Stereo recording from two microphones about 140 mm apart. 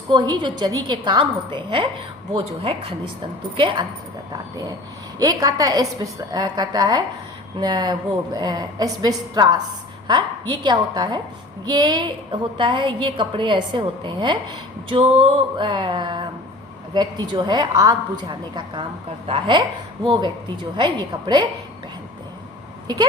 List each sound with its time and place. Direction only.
0.1 s a woman's voice: 30° right (ahead or behind)
5.2 s a woman's voice: 25° right (ahead or behind)